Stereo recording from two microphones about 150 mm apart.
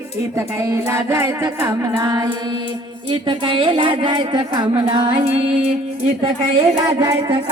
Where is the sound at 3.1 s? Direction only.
35° right (ahead or behind).